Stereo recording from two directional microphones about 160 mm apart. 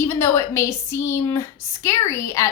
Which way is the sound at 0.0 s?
15° left (ahead or behind).